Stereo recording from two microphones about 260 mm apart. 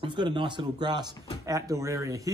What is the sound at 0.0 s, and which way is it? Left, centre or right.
Speech, centre.